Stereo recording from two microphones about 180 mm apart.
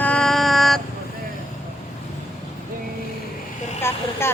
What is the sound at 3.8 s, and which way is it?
Speech, 15° left (ahead or behind).